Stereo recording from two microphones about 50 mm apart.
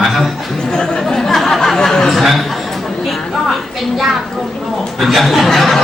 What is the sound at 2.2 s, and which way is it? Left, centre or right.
Speech, centre.